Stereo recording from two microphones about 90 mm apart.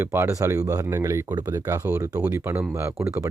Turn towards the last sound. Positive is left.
turn(degrees=-30)  # may be behind; listen again after turning